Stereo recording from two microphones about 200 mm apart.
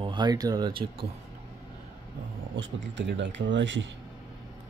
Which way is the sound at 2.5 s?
65° right (ahead or behind).